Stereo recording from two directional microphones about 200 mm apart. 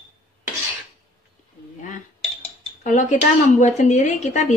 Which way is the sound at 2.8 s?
40° left (ahead or behind).